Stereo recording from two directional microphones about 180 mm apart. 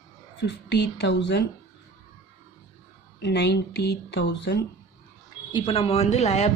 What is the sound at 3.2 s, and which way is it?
Speech, 70° left (ahead or behind).